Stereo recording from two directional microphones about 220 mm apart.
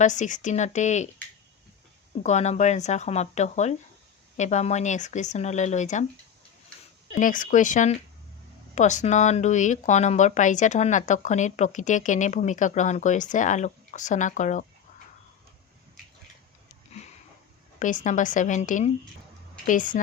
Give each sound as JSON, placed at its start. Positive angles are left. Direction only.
{"t": 0.0, "sound": "speech", "side_deg": 35}
{"t": 2.2, "sound": "speech", "side_deg": 30}
{"t": 7.1, "sound": "speech", "side_deg": 35}
{"t": 17.7, "sound": "speech", "side_deg": 35}